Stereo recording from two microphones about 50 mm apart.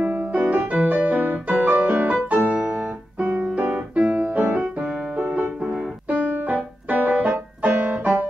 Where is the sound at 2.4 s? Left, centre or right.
Right.